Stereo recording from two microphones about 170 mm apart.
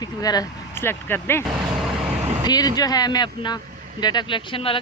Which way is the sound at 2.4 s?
25° left (ahead or behind).